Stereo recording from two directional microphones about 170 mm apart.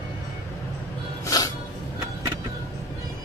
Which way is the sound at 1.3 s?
20° left (ahead or behind).